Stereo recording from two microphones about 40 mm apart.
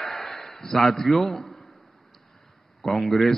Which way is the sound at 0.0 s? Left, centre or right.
Centre.